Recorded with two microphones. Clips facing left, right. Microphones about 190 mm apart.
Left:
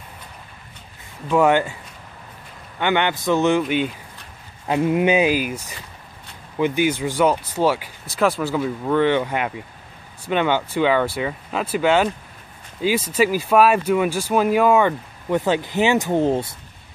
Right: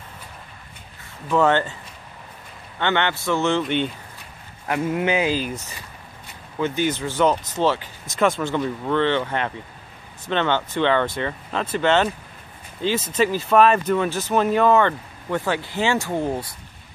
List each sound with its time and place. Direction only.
1.3 s speech: 10° left (ahead or behind)
2.8 s speech: 15° left (ahead or behind)
4.6 s speech: 20° left (ahead or behind)